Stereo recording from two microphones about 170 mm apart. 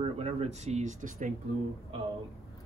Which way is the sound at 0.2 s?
40° right (ahead or behind).